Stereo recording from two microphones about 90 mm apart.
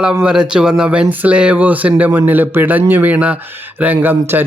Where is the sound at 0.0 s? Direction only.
10° right (ahead or behind).